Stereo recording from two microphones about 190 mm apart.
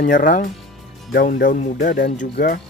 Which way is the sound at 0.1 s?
45° left (ahead or behind).